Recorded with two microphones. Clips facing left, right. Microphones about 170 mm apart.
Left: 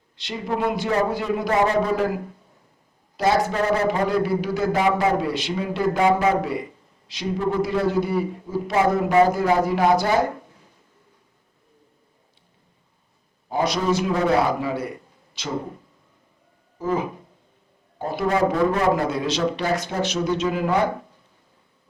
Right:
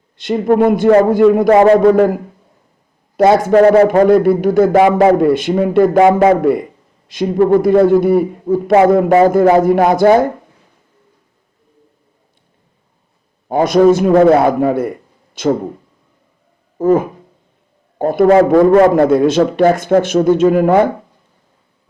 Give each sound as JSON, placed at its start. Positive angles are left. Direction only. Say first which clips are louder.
{"t": 0.2, "sound": "a man's voice", "louder": "right 13 dB", "side_deg": -50}
{"t": 3.2, "sound": "a man's voice", "louder": "right 12 dB", "side_deg": -55}
{"t": 4.7, "sound": "a man's voice", "louder": "right 8 dB", "side_deg": -75}
{"t": 13.5, "sound": "a man's voice", "louder": "right 12 dB", "side_deg": -55}
{"t": 16.7, "sound": "a man's voice", "louder": "right 12 dB", "side_deg": -50}